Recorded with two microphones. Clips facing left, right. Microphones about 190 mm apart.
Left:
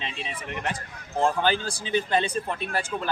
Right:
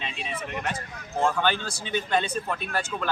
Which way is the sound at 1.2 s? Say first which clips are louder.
Left 1 dB; 30° left (ahead or behind).